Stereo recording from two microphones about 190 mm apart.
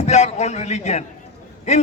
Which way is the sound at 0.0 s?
35° left (ahead or behind).